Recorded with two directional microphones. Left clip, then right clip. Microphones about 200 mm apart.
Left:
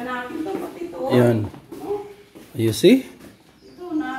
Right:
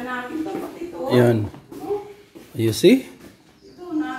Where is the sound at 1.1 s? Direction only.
10° right (ahead or behind).